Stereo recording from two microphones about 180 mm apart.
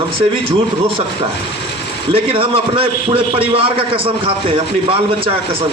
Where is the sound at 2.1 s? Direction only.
30° right (ahead or behind).